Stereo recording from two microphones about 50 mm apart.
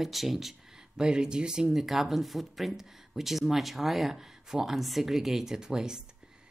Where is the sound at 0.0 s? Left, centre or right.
Centre.